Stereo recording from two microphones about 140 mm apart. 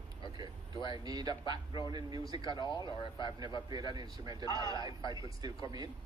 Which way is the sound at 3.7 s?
30° right (ahead or behind).